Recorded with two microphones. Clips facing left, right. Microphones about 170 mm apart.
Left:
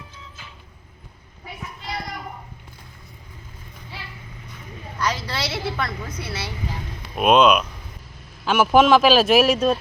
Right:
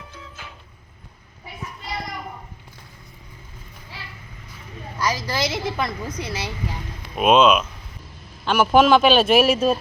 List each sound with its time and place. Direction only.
4.9 s a woman's voice: 10° right (ahead or behind)
7.2 s speech: centre (ahead or behind)